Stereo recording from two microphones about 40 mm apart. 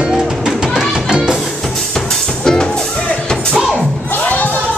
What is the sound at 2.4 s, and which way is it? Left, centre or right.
Music, centre.